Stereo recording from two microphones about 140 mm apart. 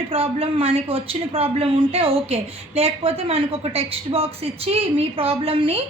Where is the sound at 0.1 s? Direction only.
45° right (ahead or behind).